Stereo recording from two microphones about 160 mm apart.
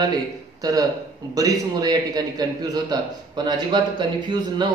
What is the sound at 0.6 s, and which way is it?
A man's voice, 20° right (ahead or behind).